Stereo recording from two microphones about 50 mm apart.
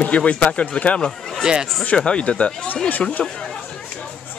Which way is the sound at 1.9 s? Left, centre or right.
Centre.